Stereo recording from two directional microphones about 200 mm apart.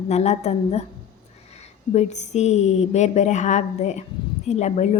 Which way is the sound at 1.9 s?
35° left (ahead or behind).